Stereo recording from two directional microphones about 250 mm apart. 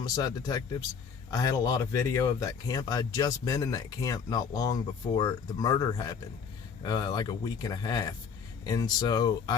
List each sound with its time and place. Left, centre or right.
0.0 s speech: centre